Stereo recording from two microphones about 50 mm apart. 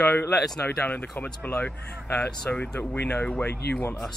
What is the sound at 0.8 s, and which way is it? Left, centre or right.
Speech, left.